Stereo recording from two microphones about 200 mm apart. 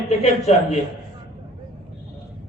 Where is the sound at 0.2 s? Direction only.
30° left (ahead or behind).